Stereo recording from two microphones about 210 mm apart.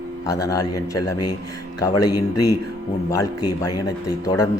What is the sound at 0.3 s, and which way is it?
Speech, 15° left (ahead or behind).